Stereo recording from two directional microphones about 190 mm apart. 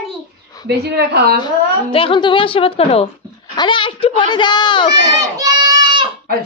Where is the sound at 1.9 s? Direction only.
30° left (ahead or behind).